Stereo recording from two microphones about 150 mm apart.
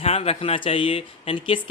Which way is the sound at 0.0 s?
40° left (ahead or behind).